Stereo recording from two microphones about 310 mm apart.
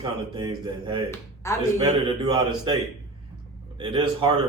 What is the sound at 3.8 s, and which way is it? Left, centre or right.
Speech, centre.